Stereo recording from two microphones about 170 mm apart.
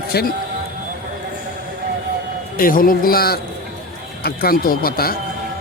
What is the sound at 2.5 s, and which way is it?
A man's voice, 55° left (ahead or behind).